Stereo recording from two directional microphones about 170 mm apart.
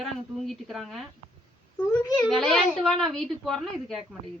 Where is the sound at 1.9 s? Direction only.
20° left (ahead or behind).